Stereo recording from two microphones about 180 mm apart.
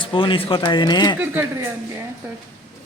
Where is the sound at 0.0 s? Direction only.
25° left (ahead or behind).